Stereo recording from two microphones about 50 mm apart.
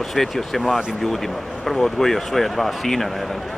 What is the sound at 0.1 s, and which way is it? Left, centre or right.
A man's voice, centre.